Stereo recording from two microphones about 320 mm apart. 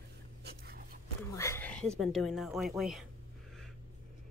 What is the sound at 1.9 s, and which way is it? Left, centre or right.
Speech, centre.